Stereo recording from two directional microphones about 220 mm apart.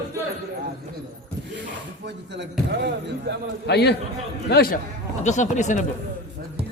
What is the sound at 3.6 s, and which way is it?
Speech, 50° left (ahead or behind).